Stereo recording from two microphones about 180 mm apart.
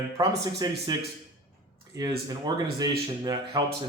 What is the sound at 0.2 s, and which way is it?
Speech, 20° right (ahead or behind).